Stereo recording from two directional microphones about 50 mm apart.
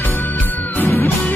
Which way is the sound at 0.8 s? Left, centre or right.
Left.